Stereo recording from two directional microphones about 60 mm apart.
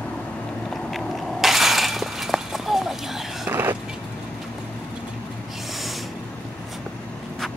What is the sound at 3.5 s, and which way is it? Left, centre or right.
Vehicle, right.